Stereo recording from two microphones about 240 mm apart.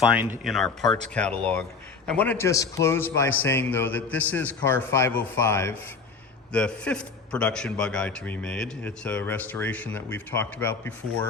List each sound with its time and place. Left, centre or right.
0.2 s a man's voice: centre
2.0 s a man's voice: centre